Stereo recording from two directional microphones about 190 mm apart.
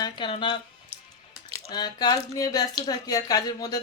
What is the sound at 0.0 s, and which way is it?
Speech, 25° left (ahead or behind).